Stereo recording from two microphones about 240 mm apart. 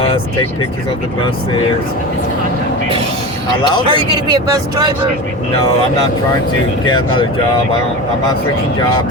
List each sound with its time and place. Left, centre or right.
3.8 s speech: centre
6.8 s speech: centre